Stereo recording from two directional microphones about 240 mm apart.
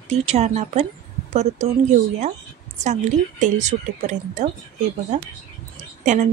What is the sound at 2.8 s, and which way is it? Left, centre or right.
Speech, right.